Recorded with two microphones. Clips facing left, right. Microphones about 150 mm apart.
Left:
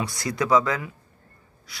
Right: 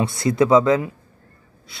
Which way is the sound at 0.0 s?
25° right (ahead or behind).